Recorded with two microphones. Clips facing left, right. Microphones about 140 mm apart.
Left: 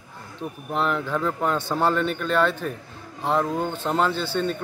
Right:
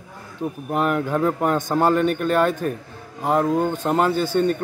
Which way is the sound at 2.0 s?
50° right (ahead or behind).